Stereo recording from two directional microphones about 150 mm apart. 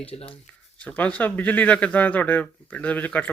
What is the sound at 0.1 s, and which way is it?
Speech, 40° left (ahead or behind).